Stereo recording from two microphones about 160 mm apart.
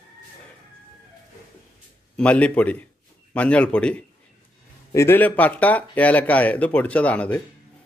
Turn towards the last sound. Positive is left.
turn(degrees=10)  # may be behind; listen again after turning